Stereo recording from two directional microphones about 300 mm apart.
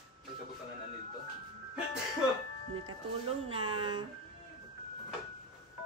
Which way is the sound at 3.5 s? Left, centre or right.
Centre.